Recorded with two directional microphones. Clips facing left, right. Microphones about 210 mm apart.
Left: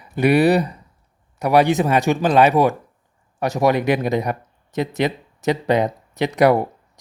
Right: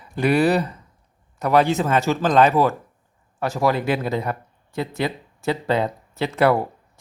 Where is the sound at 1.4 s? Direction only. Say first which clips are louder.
Left 2 dB; 10° left (ahead or behind).